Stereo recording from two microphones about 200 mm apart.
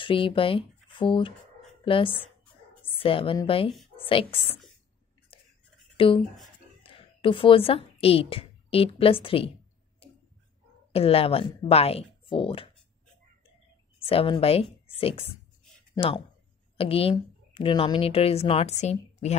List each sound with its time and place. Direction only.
0.0 s a woman's voice: 25° left (ahead or behind)
5.3 s whispering: 25° left (ahead or behind)
5.9 s a woman's voice: 25° left (ahead or behind)
10.9 s a woman's voice: 30° left (ahead or behind)
14.0 s a woman's voice: 25° left (ahead or behind)